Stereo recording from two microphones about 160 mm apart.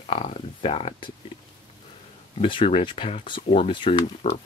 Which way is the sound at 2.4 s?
35° left (ahead or behind).